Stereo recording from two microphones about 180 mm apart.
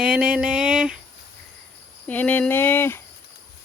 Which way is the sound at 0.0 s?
5° right (ahead or behind).